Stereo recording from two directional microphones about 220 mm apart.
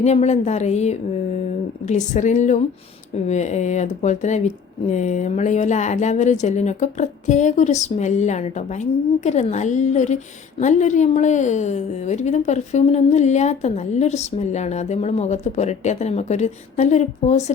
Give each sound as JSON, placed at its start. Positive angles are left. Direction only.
{"t": 0.0, "sound": "speech", "side_deg": 30}